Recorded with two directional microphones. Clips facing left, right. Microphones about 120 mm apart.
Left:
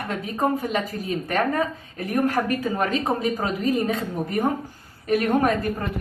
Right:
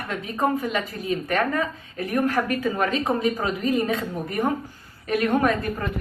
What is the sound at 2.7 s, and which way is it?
A woman's voice, 40° left (ahead or behind).